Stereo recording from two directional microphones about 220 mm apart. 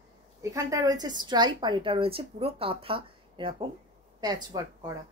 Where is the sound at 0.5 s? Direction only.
15° right (ahead or behind).